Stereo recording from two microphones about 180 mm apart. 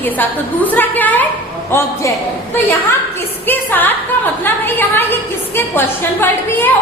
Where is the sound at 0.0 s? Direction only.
10° left (ahead or behind).